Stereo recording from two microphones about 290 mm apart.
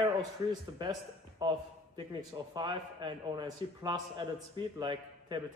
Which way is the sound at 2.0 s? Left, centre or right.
Centre.